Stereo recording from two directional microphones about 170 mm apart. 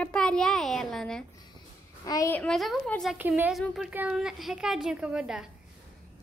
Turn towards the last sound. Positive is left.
turn(degrees=-5)  # may be behind; listen again after turning